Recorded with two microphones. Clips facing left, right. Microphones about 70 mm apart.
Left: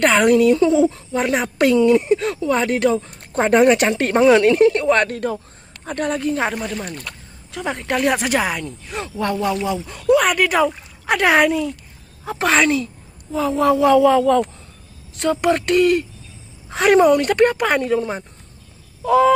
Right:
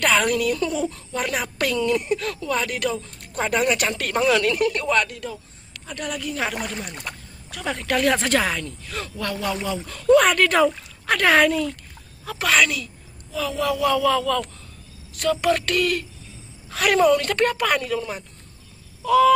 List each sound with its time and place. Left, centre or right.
0.0 s a woman's voice: left
5.0 s a man's voice: left
6.9 s speech: centre
7.5 s a woman's voice: left
12.3 s a woman's voice: left